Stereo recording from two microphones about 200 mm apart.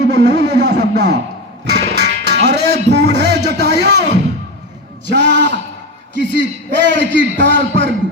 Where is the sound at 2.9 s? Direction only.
55° right (ahead or behind).